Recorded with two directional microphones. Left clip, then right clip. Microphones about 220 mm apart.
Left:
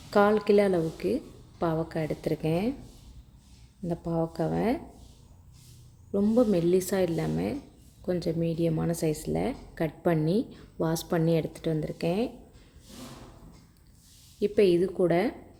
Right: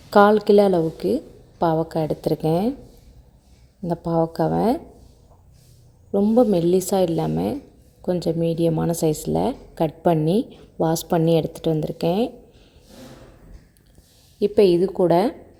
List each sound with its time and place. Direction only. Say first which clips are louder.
0.1 s speech: right 8 dB; 25° right (ahead or behind)
3.8 s speech: right 9 dB; 25° right (ahead or behind)
6.1 s speech: right 7 dB; 15° right (ahead or behind)
14.3 s speech: right 7 dB; 20° right (ahead or behind)